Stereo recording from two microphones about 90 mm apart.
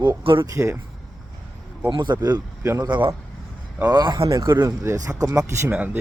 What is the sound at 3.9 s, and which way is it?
Speech, 55° right (ahead or behind).